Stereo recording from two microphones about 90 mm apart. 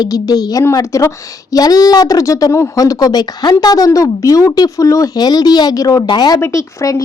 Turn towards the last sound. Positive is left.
turn(degrees=35)  # may be behind; listen again after turning